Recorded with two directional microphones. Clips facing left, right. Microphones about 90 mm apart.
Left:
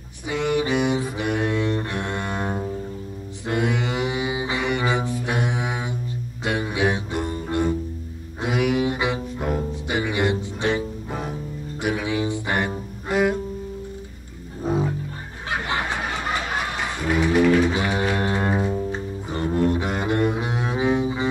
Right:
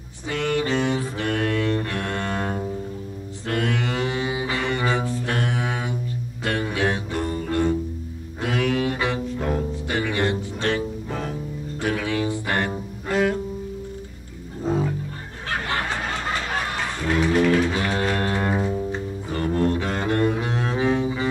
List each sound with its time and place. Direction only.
0.3 s bowed string instrument: 15° left (ahead or behind)
3.4 s music: 20° left (ahead or behind)
14.6 s music: 15° left (ahead or behind)
15.4 s snicker: 15° left (ahead or behind)
16.8 s music: 15° left (ahead or behind)